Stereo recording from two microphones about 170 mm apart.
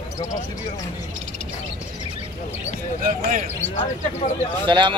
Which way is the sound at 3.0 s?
55° right (ahead or behind).